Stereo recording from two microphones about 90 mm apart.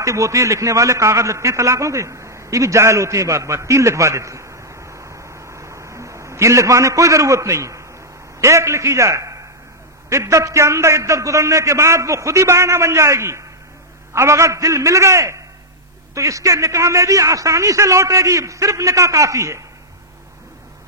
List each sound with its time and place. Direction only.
0.0 s a man's voice: 35° right (ahead or behind)